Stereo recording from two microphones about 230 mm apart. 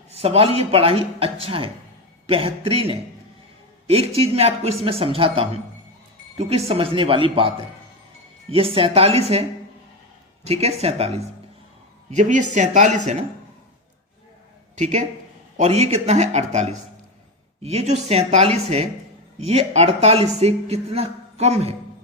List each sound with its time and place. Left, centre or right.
0.1 s a woman's voice: right
14.8 s a woman's voice: right